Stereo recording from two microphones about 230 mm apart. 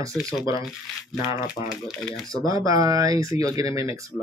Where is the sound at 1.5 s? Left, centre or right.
Centre.